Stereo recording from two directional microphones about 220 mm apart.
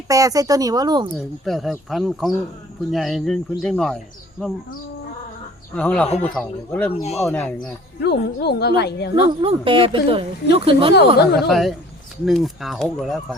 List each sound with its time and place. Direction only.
0.1 s speech: 15° right (ahead or behind)
1.5 s speech: centre (ahead or behind)
5.7 s speech: 5° left (ahead or behind)
8.0 s a woman's voice: 45° left (ahead or behind)
9.4 s speech: 25° right (ahead or behind)
10.9 s a woman's voice: 50° left (ahead or behind)
11.3 s speech: centre (ahead or behind)